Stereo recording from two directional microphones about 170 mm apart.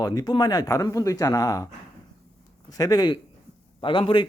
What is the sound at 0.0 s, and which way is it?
A man's voice, 20° left (ahead or behind).